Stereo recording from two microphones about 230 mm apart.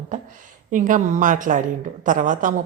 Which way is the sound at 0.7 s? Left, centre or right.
Right.